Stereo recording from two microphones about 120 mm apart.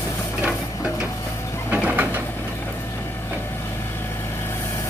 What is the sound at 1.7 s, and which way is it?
Bird, 10° right (ahead or behind).